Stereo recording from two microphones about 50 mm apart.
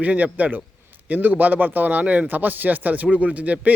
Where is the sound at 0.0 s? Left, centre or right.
Right.